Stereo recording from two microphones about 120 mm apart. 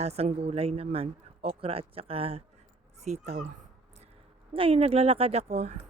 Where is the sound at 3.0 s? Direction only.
70° right (ahead or behind).